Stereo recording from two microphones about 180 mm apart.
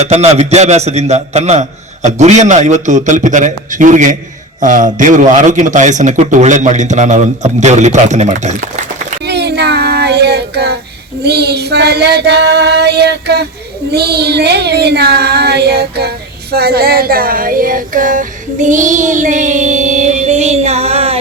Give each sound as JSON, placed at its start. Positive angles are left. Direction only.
{"t": 0.0, "sound": "a man's voice", "side_deg": -35}
{"t": 9.2, "sound": "child singing", "side_deg": -70}
{"t": 11.2, "sound": "a sound", "side_deg": -65}
{"t": 13.9, "sound": "child singing", "side_deg": -65}